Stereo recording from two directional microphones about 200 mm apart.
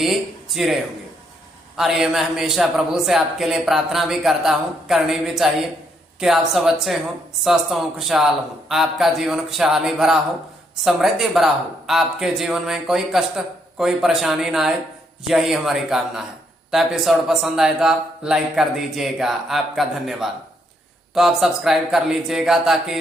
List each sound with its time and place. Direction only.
0.0 s speech: centre (ahead or behind)